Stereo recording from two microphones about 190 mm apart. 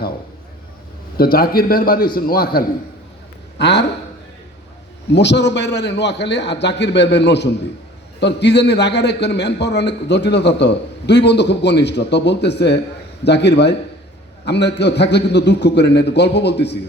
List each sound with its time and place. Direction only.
1.1 s a man's voice: 50° left (ahead or behind)
3.6 s a man's voice: 65° left (ahead or behind)
5.1 s a man's voice: 65° left (ahead or behind)